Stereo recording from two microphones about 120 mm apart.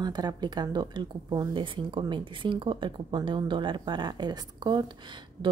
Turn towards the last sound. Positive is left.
turn(degrees=-35)  # may be behind; listen again after turning